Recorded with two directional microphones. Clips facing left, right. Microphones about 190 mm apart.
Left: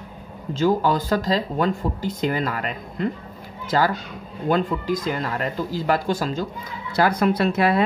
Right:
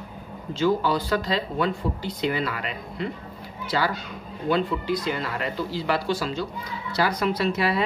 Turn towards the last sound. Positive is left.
turn(degrees=50)  # may be behind; listen again after turning